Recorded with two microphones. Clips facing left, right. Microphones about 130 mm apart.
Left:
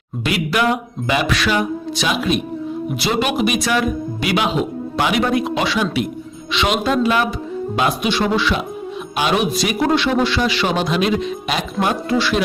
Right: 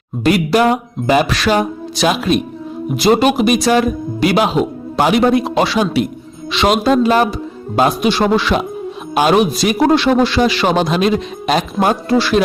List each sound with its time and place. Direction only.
0.3 s a man's voice: 40° right (ahead or behind)